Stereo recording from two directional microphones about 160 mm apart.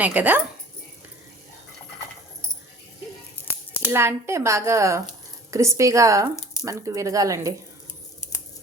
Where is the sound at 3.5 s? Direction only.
15° left (ahead or behind).